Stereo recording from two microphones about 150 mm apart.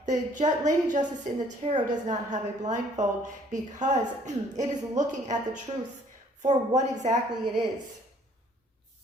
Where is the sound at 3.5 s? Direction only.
55° right (ahead or behind).